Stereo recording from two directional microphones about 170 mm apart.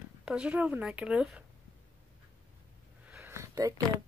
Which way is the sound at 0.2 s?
5° right (ahead or behind).